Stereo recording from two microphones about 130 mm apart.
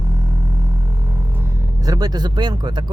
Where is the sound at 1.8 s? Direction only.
30° right (ahead or behind).